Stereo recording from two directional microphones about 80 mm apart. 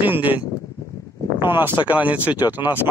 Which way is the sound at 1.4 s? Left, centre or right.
Right.